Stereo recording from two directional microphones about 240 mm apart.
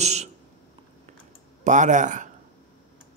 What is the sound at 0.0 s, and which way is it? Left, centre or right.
Speech, right.